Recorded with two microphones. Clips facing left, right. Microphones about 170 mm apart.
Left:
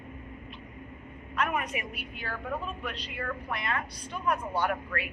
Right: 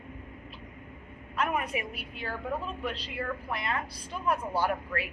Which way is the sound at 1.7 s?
30° right (ahead or behind).